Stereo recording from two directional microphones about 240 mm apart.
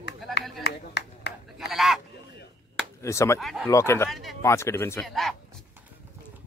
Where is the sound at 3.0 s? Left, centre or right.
Centre.